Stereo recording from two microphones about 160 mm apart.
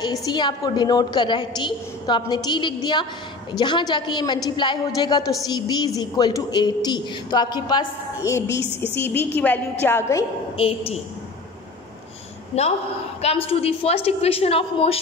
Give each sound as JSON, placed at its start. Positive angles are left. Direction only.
{"t": 0.0, "sound": "a woman's voice", "side_deg": 25}
{"t": 10.6, "sound": "a woman's voice", "side_deg": 35}
{"t": 12.5, "sound": "a woman's voice", "side_deg": 40}